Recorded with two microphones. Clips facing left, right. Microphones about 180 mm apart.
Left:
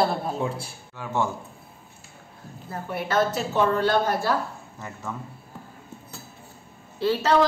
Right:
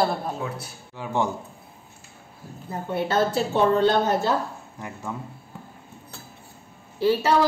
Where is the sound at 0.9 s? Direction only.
15° right (ahead or behind).